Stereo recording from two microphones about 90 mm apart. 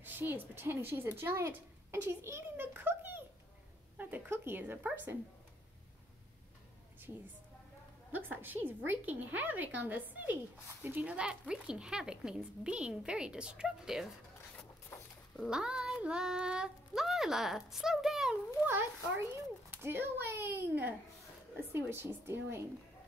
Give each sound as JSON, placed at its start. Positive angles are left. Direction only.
{"t": 0.0, "sound": "a woman's voice", "side_deg": -20}
{"t": 8.1, "sound": "a woman's voice", "side_deg": -20}
{"t": 14.9, "sound": "a sound", "side_deg": 25}
{"t": 15.5, "sound": "speech", "side_deg": -10}
{"t": 18.7, "sound": "a child's voice", "side_deg": -25}